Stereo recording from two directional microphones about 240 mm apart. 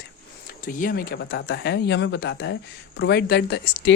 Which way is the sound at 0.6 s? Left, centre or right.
Left.